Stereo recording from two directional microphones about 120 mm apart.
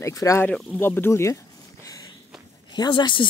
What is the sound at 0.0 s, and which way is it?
Speech, 25° left (ahead or behind).